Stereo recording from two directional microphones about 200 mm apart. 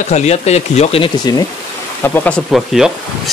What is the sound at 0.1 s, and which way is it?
Speech, 35° left (ahead or behind).